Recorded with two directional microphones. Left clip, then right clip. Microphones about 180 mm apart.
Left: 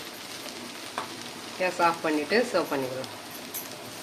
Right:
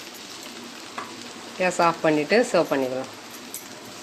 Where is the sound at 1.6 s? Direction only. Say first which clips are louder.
Right 4 dB; 50° right (ahead or behind).